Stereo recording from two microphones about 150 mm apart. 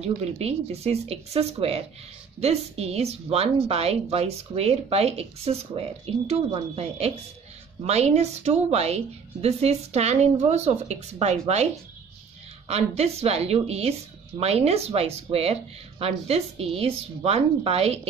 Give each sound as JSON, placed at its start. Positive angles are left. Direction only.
{"t": 0.0, "sound": "speech", "side_deg": -45}